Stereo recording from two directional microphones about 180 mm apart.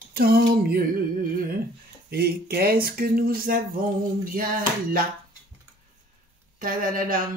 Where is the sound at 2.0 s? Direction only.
55° right (ahead or behind).